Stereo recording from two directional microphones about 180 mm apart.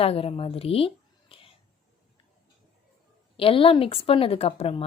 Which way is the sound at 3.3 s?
30° left (ahead or behind).